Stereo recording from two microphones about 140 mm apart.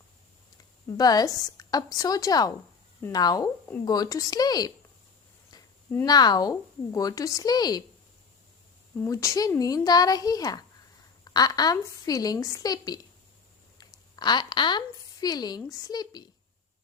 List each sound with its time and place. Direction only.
0.9 s speech: 30° left (ahead or behind)
6.1 s speech: 30° left (ahead or behind)
9.0 s a woman's voice: 25° left (ahead or behind)